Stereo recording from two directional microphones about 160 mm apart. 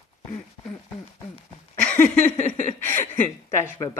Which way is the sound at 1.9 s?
10° left (ahead or behind).